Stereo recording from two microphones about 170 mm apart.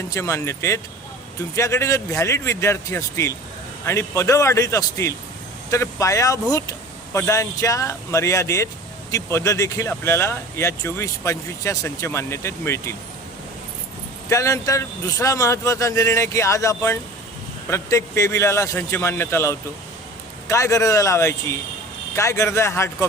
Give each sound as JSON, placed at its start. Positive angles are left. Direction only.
{"t": 0.1, "sound": "speech", "side_deg": 15}
{"t": 14.3, "sound": "speech", "side_deg": 20}